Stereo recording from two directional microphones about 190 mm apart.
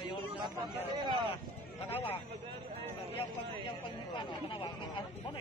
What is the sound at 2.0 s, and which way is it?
Speech, 30° left (ahead or behind).